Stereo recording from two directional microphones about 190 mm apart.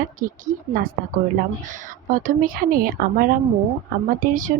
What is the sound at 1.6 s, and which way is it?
Speech, 40° right (ahead or behind).